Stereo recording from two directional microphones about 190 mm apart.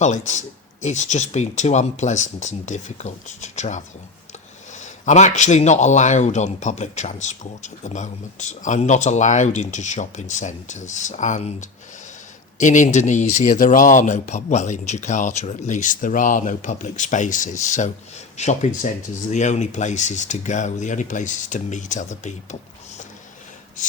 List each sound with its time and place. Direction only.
0.0 s a man's voice: 40° left (ahead or behind)